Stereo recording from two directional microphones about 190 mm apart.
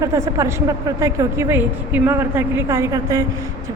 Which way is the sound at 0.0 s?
15° right (ahead or behind).